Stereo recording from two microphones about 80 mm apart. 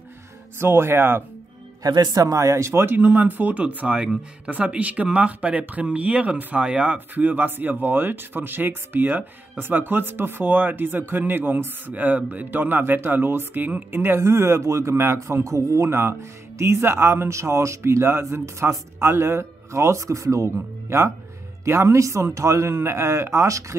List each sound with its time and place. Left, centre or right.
0.6 s speech: right
1.8 s a man's voice: right